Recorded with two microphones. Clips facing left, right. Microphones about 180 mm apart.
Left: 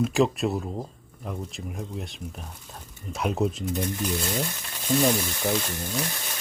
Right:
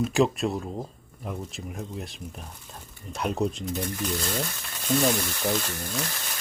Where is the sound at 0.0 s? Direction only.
Centre (ahead or behind).